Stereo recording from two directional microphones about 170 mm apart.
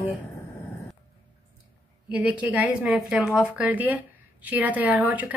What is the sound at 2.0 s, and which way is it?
A woman's voice, 10° right (ahead or behind).